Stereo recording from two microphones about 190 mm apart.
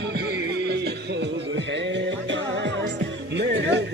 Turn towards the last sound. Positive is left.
turn(degrees=-65)  # may be behind; listen again after turning